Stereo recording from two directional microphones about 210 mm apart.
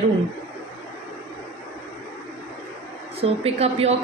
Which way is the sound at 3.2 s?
30° right (ahead or behind).